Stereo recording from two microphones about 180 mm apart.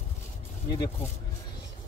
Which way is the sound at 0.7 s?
20° left (ahead or behind).